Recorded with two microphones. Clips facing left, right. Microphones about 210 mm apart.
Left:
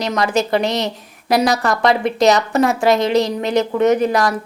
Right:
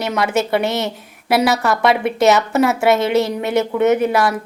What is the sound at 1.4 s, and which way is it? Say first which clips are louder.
A woman's voice: right 1 dB; 5° right (ahead or behind).